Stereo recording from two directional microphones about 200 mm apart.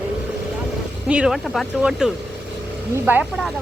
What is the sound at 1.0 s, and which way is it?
Speech, 5° right (ahead or behind).